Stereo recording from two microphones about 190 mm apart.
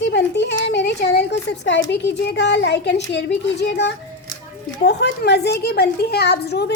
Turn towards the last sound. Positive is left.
turn(degrees=60)  # may be behind; listen again after turning